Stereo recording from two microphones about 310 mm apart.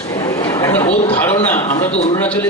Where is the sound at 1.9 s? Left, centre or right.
Left.